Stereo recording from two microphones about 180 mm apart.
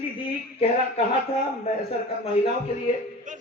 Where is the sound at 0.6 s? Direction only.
30° left (ahead or behind).